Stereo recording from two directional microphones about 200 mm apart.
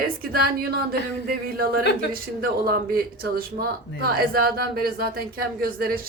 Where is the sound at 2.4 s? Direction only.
50° right (ahead or behind).